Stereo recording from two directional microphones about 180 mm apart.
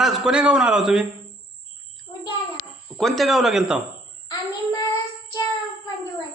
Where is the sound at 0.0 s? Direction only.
5° right (ahead or behind).